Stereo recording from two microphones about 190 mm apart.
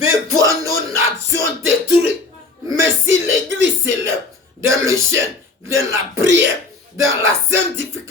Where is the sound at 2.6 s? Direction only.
15° right (ahead or behind).